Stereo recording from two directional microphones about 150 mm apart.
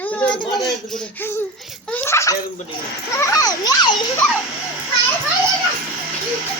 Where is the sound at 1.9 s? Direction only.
15° left (ahead or behind).